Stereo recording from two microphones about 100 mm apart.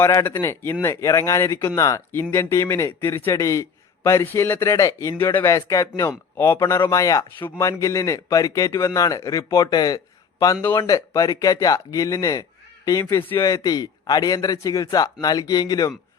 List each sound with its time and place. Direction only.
0.0 s a man's voice: 25° left (ahead or behind)
7.3 s speech: 25° left (ahead or behind)
13.6 s speech: 40° left (ahead or behind)